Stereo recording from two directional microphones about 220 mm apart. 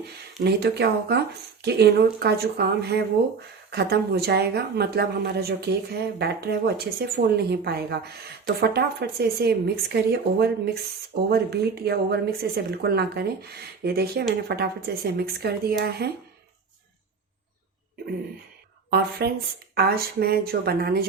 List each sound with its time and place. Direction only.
0.4 s a woman's voice: 45° right (ahead or behind)
18.9 s a woman's voice: 45° right (ahead or behind)